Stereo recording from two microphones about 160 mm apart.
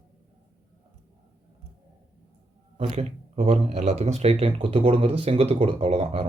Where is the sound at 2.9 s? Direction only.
40° right (ahead or behind).